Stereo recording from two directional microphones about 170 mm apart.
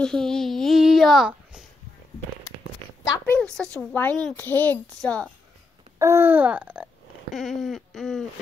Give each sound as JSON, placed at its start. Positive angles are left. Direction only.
{"t": 0.0, "sound": "a sound", "side_deg": 5}
{"t": 3.0, "sound": "a woman's voice", "side_deg": 20}
{"t": 3.3, "sound": "a child's voice", "side_deg": 5}
{"t": 5.0, "sound": "owl", "side_deg": 5}
{"t": 5.9, "sound": "wail", "side_deg": -15}
{"t": 7.3, "sound": "owl", "side_deg": 0}